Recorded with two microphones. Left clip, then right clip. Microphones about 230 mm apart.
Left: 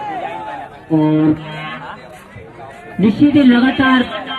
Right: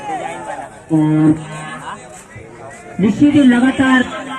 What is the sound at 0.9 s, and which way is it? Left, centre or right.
Speech, left.